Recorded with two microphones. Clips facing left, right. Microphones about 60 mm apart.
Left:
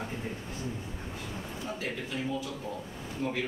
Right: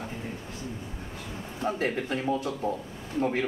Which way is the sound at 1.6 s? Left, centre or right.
Right.